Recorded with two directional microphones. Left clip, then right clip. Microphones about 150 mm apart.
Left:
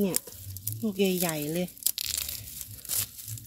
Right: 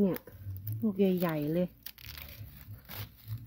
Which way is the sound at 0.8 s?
5° left (ahead or behind).